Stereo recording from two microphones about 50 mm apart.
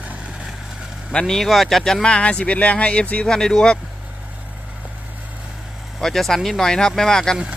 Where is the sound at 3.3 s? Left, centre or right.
Centre.